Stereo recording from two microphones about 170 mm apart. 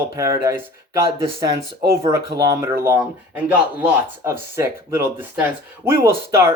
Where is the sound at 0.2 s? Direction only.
15° right (ahead or behind).